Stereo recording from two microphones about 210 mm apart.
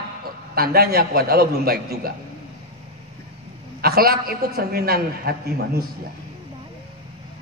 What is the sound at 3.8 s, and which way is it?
A man's voice, 45° right (ahead or behind).